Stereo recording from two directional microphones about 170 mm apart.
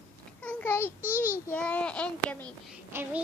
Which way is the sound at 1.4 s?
10° left (ahead or behind).